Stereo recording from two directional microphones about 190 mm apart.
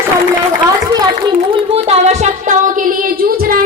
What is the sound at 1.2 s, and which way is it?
Music, 30° right (ahead or behind).